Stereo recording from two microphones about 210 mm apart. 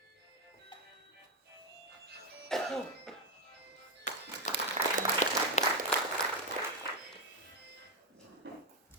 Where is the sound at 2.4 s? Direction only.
Centre (ahead or behind).